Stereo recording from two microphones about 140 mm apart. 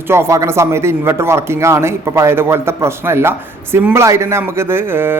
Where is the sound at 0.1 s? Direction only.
20° right (ahead or behind).